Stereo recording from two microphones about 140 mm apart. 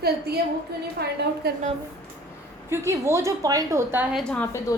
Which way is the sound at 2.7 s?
20° right (ahead or behind).